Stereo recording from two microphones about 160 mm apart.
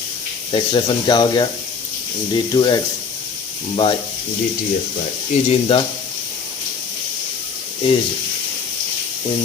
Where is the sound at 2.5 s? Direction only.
25° left (ahead or behind).